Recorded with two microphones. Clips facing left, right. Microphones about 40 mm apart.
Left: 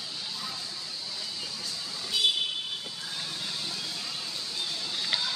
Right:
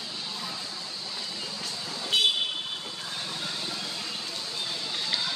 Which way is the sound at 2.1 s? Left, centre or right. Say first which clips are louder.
Right 3 dB; right.